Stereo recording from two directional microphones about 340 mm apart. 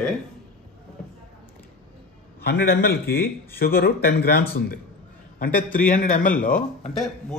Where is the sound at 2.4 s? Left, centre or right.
Left.